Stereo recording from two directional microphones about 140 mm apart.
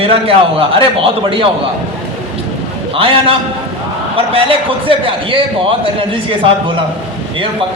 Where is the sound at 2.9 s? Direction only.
40° right (ahead or behind).